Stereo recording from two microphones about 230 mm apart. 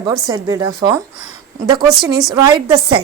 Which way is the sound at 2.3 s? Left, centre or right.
Centre.